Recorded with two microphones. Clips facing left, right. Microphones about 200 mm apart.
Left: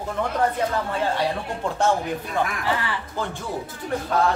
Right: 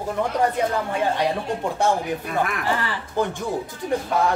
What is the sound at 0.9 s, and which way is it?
Speech, 15° right (ahead or behind).